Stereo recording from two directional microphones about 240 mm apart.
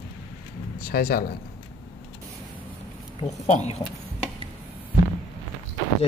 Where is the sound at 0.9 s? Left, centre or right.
Left.